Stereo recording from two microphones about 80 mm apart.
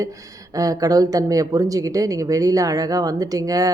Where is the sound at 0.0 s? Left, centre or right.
Right.